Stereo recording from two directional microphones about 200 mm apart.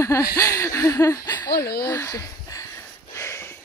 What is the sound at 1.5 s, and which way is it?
Speech, 50° left (ahead or behind).